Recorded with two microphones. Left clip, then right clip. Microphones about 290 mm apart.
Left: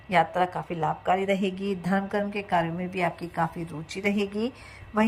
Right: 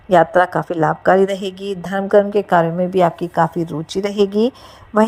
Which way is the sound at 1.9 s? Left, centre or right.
Right.